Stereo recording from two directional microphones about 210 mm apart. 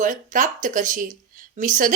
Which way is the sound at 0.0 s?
35° right (ahead or behind).